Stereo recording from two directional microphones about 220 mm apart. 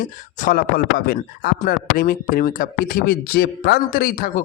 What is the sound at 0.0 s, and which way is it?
Speech, 35° left (ahead or behind).